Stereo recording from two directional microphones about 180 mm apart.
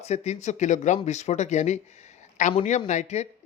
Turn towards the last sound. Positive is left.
turn(degrees=35)  # may be behind; listen again after turning